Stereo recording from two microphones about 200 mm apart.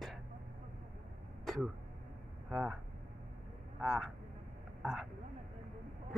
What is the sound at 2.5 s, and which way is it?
Speech, 5° right (ahead or behind).